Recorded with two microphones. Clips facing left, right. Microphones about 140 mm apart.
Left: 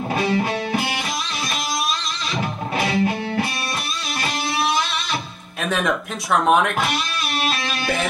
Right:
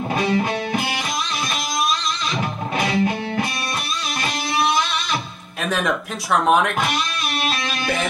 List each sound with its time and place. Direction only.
0.3 s music: 30° left (ahead or behind)
2.3 s music: 30° left (ahead or behind)
5.6 s speech: centre (ahead or behind)